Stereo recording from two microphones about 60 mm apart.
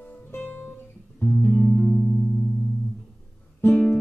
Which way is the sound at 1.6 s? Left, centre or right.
Centre.